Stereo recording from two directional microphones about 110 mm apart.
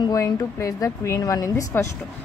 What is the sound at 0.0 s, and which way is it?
A woman's voice, 35° left (ahead or behind).